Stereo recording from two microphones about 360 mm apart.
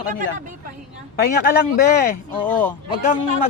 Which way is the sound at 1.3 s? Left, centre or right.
Left.